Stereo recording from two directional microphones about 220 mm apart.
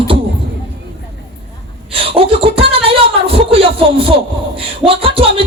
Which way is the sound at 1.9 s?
25° right (ahead or behind).